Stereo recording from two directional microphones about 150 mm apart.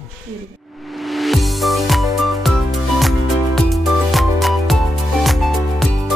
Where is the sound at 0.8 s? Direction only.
Centre (ahead or behind).